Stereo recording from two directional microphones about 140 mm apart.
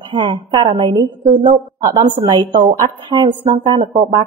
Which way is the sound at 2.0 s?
35° right (ahead or behind).